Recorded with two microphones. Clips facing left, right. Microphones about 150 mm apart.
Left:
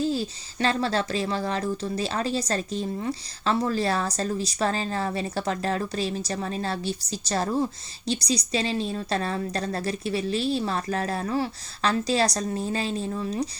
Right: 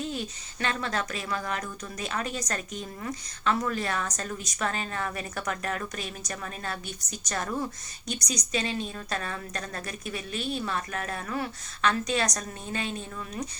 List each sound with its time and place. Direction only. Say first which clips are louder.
0.0 s speech: left 7 dB; 30° left (ahead or behind)